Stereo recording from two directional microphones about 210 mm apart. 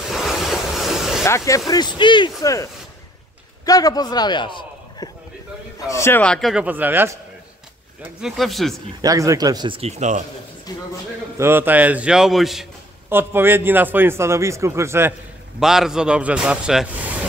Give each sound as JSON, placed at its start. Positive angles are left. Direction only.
{"t": 0.1, "sound": "vehicle", "side_deg": 0}
{"t": 1.2, "sound": "a man's voice", "side_deg": 15}
{"t": 9.0, "sound": "speech", "side_deg": -15}
{"t": 10.7, "sound": "speech", "side_deg": 20}
{"t": 11.3, "sound": "a man's voice", "side_deg": -10}